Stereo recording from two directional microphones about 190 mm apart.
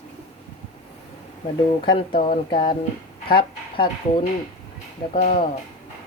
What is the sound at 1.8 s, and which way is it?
Speech, 25° left (ahead or behind).